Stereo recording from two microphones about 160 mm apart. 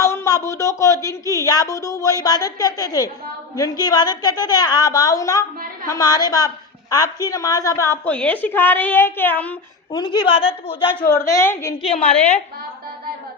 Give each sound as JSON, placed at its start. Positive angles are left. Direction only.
{"t": 0.0, "sound": "a woman's voice", "side_deg": 20}
{"t": 9.9, "sound": "a woman's voice", "side_deg": 25}
{"t": 10.3, "sound": "a woman's voice", "side_deg": 35}
{"t": 11.8, "sound": "a woman's voice", "side_deg": 40}